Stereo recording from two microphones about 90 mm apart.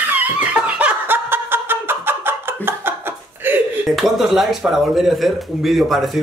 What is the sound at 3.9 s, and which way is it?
Speech, centre (ahead or behind).